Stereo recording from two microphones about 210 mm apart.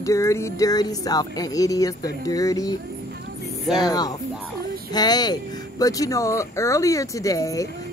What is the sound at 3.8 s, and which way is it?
Speech, 20° left (ahead or behind).